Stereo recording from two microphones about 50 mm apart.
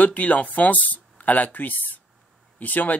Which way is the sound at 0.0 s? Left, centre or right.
Left.